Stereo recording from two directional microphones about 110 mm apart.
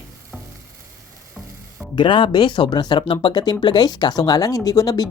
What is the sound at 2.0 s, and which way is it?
Speech, 45° left (ahead or behind).